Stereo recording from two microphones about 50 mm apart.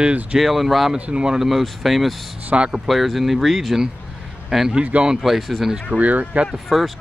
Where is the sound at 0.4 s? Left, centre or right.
Centre.